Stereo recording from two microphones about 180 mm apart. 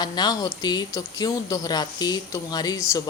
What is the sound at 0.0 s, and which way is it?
Speech, 25° left (ahead or behind).